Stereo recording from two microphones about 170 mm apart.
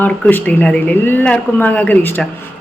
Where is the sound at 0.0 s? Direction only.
10° left (ahead or behind).